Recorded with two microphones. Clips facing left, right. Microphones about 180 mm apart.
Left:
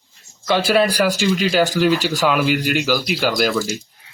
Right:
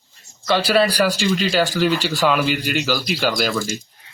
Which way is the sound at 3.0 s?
5° left (ahead or behind).